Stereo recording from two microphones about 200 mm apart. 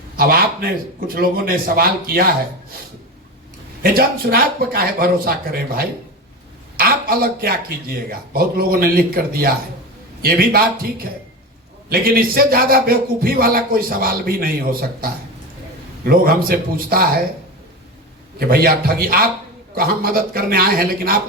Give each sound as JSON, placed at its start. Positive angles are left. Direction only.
{"t": 0.2, "sound": "a man's voice", "side_deg": -50}
{"t": 3.8, "sound": "a man's voice", "side_deg": -50}
{"t": 11.9, "sound": "a man's voice", "side_deg": -50}
{"t": 18.3, "sound": "a man's voice", "side_deg": -50}